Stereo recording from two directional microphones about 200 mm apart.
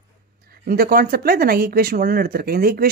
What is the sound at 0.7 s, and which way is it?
Speech, 45° right (ahead or behind).